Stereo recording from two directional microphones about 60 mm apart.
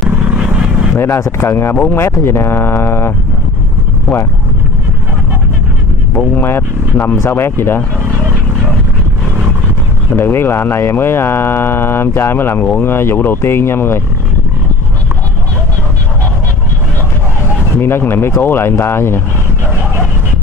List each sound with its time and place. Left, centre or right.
0.3 s vehicle: centre
0.9 s speech: left
1.8 s speech: left
6.3 s speech: left
10.1 s speech: left
17.7 s speech: left